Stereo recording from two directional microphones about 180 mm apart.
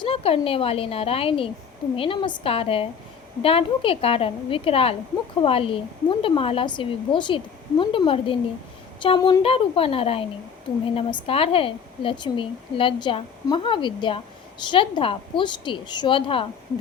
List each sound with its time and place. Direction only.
0.0 s a woman's voice: 30° left (ahead or behind)